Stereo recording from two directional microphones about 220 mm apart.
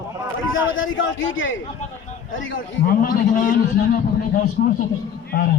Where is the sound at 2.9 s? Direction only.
40° left (ahead or behind).